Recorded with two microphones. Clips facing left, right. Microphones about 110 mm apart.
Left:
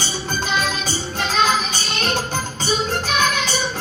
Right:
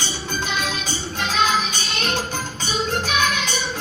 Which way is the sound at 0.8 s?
40° left (ahead or behind).